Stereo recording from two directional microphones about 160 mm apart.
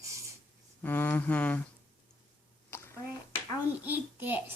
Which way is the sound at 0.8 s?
10° left (ahead or behind).